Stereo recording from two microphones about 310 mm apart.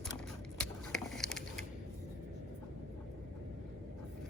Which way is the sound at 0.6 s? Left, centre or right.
Centre.